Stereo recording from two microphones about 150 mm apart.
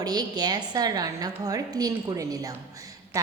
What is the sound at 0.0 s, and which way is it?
A woman's voice, 25° right (ahead or behind).